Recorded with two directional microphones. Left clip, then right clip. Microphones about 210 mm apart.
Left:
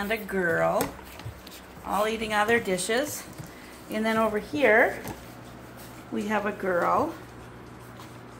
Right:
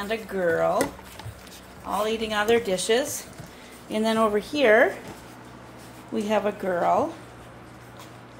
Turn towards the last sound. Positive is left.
turn(degrees=-10)  # may be behind; listen again after turning